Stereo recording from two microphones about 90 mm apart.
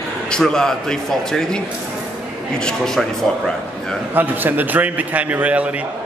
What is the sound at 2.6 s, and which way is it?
Speech, 5° left (ahead or behind).